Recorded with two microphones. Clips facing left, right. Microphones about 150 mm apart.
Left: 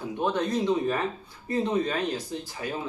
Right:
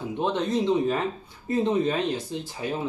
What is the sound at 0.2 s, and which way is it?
Speech, 25° right (ahead or behind).